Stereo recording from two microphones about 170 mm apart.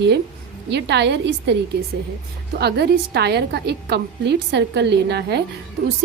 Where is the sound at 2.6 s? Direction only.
70° right (ahead or behind).